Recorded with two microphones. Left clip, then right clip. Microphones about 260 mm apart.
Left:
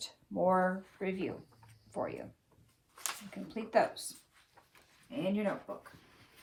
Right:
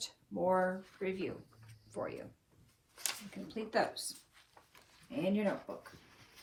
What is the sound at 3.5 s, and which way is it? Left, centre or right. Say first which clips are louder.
Speech: left 4 dB; left.